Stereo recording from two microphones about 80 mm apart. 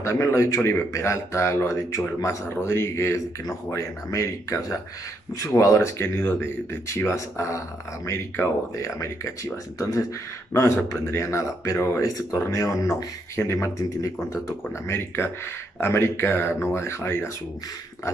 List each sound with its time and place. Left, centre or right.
0.0 s speech: left
2.2 s speech: left
12.4 s speech: left
14.9 s speech: left